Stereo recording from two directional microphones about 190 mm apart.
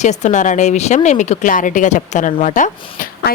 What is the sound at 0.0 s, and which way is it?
A woman's voice, 35° left (ahead or behind).